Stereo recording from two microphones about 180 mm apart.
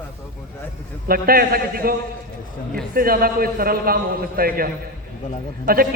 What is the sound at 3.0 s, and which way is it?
A man's voice, 55° right (ahead or behind).